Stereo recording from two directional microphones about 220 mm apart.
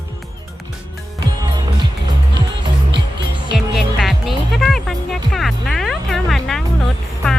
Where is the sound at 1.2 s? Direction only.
20° right (ahead or behind).